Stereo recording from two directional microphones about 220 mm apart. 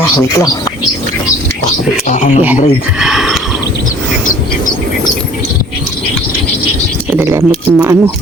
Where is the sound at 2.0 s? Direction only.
35° left (ahead or behind).